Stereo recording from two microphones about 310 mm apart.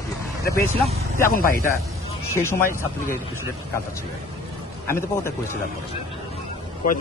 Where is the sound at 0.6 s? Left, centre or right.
Centre.